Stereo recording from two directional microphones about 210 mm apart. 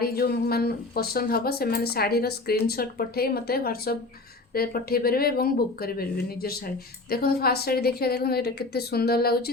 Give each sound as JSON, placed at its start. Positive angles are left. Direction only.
{"t": 0.0, "sound": "speech", "side_deg": 45}